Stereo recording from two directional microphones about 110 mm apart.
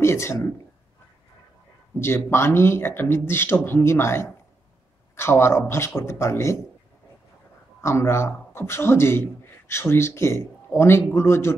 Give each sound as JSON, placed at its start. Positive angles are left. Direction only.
{"t": 0.0, "sound": "a man's voice", "side_deg": 25}
{"t": 2.0, "sound": "a man's voice", "side_deg": 20}
{"t": 7.8, "sound": "a man's voice", "side_deg": 25}